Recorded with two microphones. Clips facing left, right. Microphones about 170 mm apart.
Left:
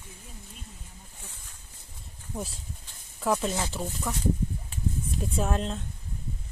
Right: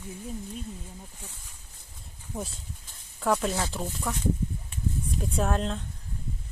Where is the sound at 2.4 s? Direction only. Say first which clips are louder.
Even; centre (ahead or behind).